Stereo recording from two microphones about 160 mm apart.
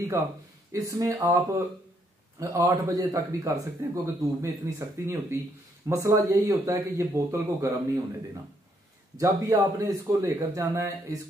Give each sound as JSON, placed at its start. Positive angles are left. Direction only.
{"t": 0.7, "sound": "a man's voice", "side_deg": -20}
{"t": 9.1, "sound": "a man's voice", "side_deg": -20}